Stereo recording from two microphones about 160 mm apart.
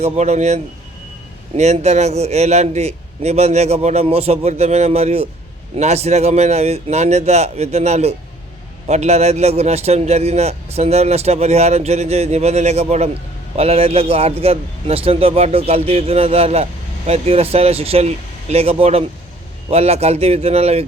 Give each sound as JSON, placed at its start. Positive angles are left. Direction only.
{"t": 0.0, "sound": "a man's voice", "side_deg": -45}